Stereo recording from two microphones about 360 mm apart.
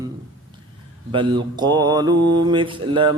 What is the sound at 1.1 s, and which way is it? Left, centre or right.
Mantra, centre.